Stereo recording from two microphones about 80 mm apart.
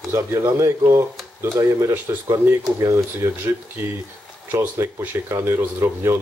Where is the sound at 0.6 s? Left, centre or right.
Right.